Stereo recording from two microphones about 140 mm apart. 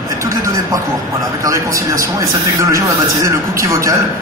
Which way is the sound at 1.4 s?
20° right (ahead or behind).